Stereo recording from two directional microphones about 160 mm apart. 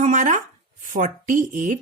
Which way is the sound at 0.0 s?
50° right (ahead or behind).